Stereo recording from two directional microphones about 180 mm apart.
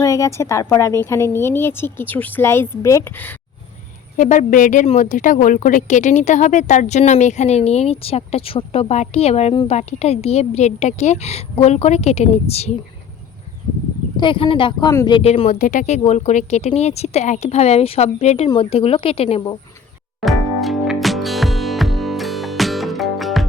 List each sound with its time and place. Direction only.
0.0 s a woman's voice: 20° left (ahead or behind)
4.2 s a woman's voice: 45° left (ahead or behind)
14.2 s speech: 30° left (ahead or behind)
15.2 s a woman's voice: 35° left (ahead or behind)
20.2 s music: centre (ahead or behind)